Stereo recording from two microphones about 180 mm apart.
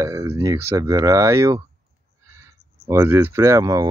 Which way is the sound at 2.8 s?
15° right (ahead or behind).